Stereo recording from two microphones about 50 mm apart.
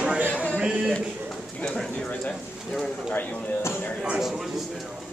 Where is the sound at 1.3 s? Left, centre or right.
Centre.